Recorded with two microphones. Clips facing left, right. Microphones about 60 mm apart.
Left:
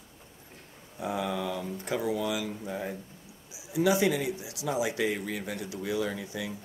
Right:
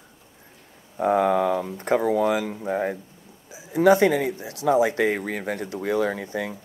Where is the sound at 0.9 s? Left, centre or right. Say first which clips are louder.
Right 12 dB; right.